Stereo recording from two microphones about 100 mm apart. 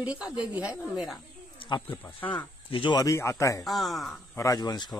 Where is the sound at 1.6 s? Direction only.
50° left (ahead or behind).